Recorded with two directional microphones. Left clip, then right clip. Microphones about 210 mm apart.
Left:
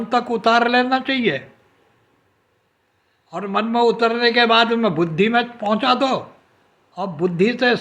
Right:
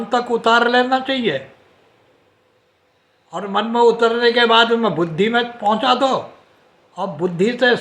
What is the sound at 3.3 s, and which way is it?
A man's voice, 20° left (ahead or behind).